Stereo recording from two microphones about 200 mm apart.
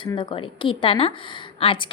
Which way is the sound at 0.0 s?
25° left (ahead or behind).